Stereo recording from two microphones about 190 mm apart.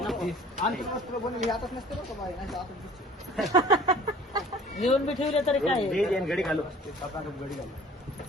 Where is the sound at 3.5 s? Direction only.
20° right (ahead or behind).